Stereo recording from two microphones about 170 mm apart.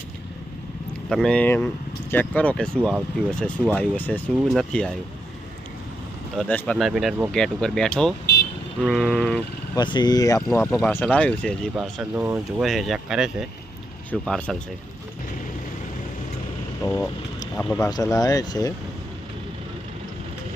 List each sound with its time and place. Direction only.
1.1 s speech: 5° left (ahead or behind)
6.5 s speech: 5° left (ahead or behind)
9.7 s speech: 25° left (ahead or behind)
10.7 s speech: centre (ahead or behind)
11.8 s speech: 5° right (ahead or behind)
12.6 s speech: centre (ahead or behind)
16.8 s vehicle: 15° left (ahead or behind)
17.7 s speech: 20° left (ahead or behind)